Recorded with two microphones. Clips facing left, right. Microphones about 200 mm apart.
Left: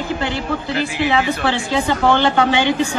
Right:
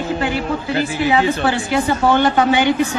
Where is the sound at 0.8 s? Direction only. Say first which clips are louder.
Right 2 dB; 30° right (ahead or behind).